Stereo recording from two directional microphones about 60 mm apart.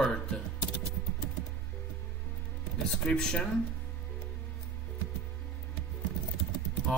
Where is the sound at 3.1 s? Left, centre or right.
Centre.